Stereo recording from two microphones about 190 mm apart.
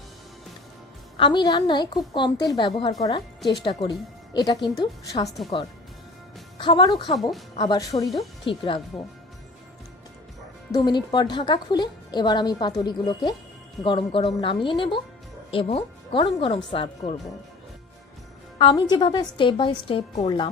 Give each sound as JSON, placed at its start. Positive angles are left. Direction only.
{"t": 1.1, "sound": "speech", "side_deg": 25}
{"t": 6.6, "sound": "speech", "side_deg": 25}
{"t": 7.2, "sound": "speech", "side_deg": 0}
{"t": 7.5, "sound": "speech", "side_deg": 25}
{"t": 10.7, "sound": "speech", "side_deg": 25}
{"t": 18.6, "sound": "speech", "side_deg": 20}